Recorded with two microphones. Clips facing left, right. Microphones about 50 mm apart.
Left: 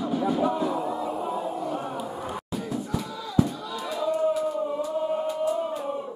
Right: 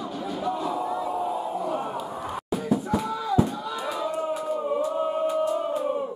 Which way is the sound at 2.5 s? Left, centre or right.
Centre.